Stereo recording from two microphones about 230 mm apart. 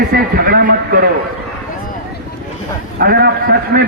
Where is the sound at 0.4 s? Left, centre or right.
Right.